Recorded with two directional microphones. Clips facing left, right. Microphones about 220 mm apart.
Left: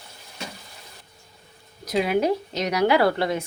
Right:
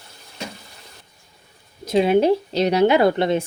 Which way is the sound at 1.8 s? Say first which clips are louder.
Right 6 dB; 25° right (ahead or behind).